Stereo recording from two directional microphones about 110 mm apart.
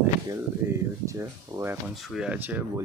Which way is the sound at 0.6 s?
25° right (ahead or behind).